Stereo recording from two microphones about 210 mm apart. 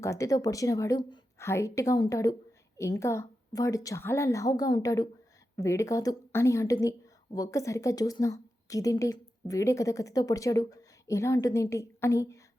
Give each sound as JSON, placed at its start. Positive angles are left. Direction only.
{"t": 0.0, "sound": "a woman's voice", "side_deg": 15}